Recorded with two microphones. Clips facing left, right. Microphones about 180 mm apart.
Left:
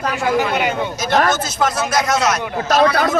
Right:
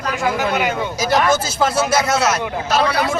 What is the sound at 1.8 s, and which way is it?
Speech, 5° right (ahead or behind).